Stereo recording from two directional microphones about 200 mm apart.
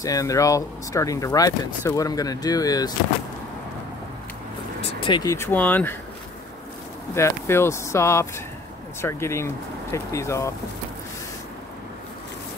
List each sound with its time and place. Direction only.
0.0 s speech: 15° left (ahead or behind)
5.0 s speech: 20° left (ahead or behind)
7.2 s speech: 15° left (ahead or behind)